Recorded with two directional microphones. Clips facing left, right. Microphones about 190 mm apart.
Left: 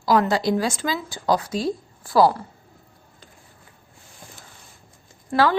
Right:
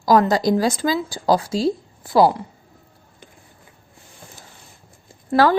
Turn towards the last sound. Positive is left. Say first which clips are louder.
# right 4 dB
turn(degrees=-40)  # may be behind; listen again after turning